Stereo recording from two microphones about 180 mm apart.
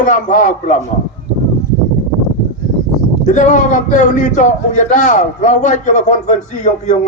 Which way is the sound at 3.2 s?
40° left (ahead or behind).